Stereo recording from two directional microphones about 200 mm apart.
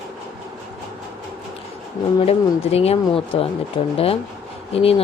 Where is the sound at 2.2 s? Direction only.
30° left (ahead or behind).